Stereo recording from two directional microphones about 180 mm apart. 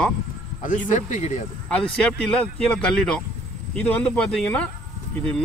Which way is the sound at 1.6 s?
5° left (ahead or behind).